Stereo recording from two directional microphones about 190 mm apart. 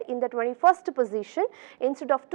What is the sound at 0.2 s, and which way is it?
A woman's voice, 15° right (ahead or behind).